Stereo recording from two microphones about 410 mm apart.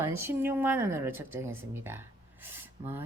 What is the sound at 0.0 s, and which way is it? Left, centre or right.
Speech, centre.